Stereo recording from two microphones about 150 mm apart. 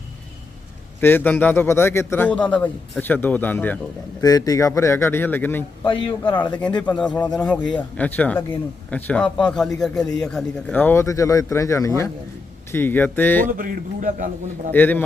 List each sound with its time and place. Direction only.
1.0 s a man's voice: 10° left (ahead or behind)
4.2 s a man's voice: 25° left (ahead or behind)
5.8 s a man's voice: 35° left (ahead or behind)
6.4 s a man's voice: 10° left (ahead or behind)
13.4 s a man's voice: 70° right (ahead or behind)
14.7 s a man's voice: 15° left (ahead or behind)